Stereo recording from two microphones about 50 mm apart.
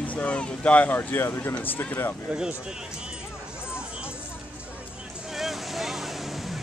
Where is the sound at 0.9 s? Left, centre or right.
Left.